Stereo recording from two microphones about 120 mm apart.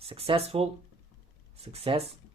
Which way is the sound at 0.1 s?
50° right (ahead or behind).